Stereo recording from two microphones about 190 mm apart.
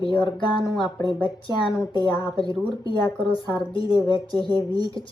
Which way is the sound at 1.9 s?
25° left (ahead or behind).